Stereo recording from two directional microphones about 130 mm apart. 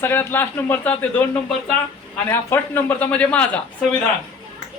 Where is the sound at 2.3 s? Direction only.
15° left (ahead or behind).